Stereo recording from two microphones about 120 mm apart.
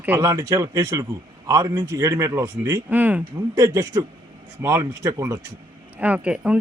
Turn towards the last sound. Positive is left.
turn(degrees=-10)  # may be behind; listen again after turning